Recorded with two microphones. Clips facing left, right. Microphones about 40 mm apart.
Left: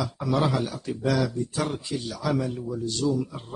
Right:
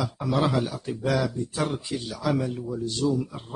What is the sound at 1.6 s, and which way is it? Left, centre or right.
A man's voice, centre.